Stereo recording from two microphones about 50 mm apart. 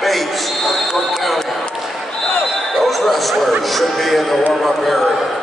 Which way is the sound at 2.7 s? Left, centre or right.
Centre.